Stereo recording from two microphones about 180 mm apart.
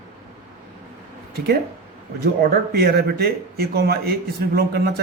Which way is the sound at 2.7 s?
60° right (ahead or behind).